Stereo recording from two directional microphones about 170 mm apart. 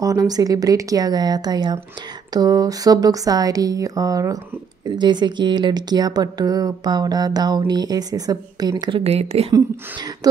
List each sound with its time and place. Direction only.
0.0 s speech: 20° right (ahead or behind)
9.0 s speech: 35° right (ahead or behind)